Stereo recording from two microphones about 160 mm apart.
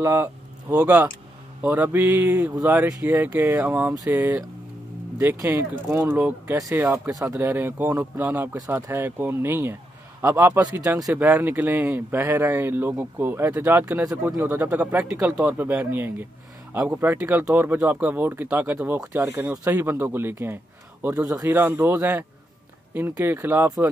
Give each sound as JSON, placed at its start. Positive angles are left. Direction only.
{"t": 0.0, "sound": "speech", "side_deg": -20}